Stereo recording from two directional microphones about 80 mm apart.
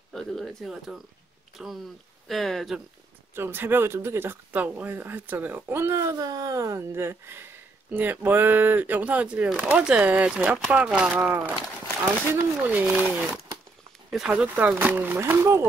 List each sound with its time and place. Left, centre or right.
0.1 s speech: centre
2.2 s speech: centre
3.3 s speech: right
4.5 s speech: right
5.9 s speech: right
15.1 s speech: right